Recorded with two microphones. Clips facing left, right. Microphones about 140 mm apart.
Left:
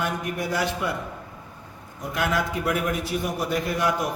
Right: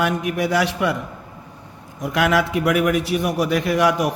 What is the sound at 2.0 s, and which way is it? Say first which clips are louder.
A man's voice: right 7 dB; 85° right.